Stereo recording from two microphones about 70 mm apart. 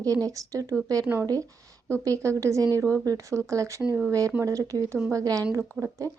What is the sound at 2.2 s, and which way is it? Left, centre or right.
Speech, right.